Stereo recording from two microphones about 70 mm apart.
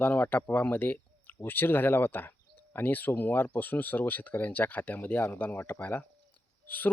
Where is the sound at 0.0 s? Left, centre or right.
Left.